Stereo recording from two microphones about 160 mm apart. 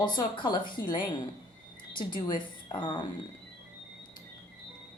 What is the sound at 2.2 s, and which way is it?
Speech, 30° left (ahead or behind).